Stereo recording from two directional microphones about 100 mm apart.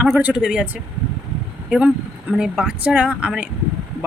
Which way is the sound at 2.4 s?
5° right (ahead or behind).